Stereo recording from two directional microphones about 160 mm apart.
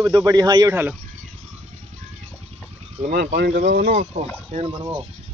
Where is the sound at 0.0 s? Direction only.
20° right (ahead or behind).